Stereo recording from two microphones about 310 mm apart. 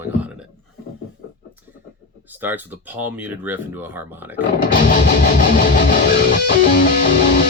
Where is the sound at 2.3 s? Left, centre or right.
Centre.